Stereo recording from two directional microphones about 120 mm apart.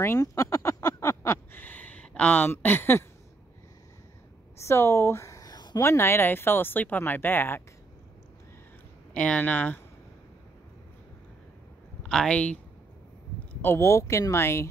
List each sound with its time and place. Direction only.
0.0 s a sound: 25° left (ahead or behind)
4.6 s a sound: 20° left (ahead or behind)
5.8 s speech: 20° left (ahead or behind)
9.1 s speech: 10° left (ahead or behind)
12.0 s speech: 5° left (ahead or behind)
13.6 s speech: 20° left (ahead or behind)